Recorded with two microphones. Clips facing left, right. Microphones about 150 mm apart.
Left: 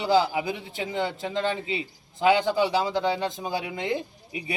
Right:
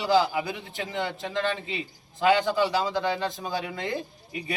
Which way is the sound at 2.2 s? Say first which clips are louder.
Left 1 dB; 15° left (ahead or behind).